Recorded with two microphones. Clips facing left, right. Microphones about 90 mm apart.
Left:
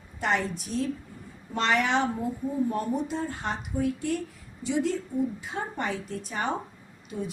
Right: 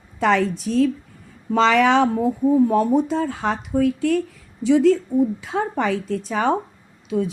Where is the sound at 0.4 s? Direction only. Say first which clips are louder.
Right 9 dB; 90° right.